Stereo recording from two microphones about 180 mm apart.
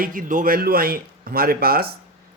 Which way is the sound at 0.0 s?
50° right (ahead or behind).